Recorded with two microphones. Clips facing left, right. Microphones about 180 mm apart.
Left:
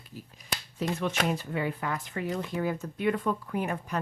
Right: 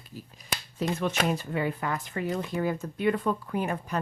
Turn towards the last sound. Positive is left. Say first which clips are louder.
# right 1 dB
turn(degrees=-30)  # may be behind; listen again after turning